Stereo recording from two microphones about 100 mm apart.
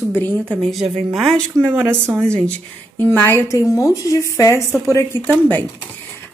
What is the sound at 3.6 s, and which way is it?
Speech, 35° left (ahead or behind).